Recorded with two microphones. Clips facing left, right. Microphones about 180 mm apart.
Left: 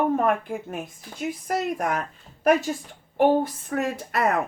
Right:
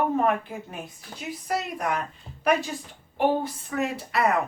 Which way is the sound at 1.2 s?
50° left (ahead or behind).